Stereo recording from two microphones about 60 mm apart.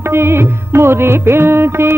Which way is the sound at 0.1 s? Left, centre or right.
Right.